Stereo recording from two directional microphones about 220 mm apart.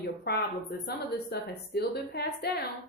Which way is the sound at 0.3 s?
45° left (ahead or behind).